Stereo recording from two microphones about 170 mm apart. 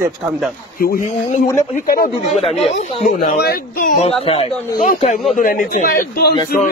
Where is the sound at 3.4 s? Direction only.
60° left (ahead or behind).